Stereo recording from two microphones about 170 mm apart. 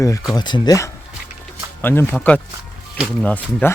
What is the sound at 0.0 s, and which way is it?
Speech, 20° left (ahead or behind).